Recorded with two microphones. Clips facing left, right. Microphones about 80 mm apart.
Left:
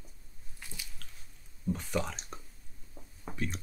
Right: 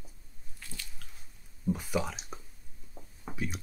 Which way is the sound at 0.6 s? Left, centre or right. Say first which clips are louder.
Right 1 dB; centre.